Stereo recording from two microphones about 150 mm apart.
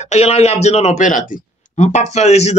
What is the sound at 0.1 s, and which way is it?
Speech, 45° left (ahead or behind).